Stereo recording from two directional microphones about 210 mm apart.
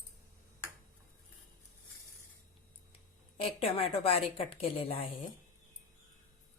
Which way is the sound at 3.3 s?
30° left (ahead or behind).